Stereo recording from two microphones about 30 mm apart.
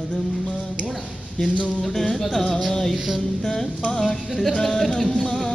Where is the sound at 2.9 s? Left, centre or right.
Centre.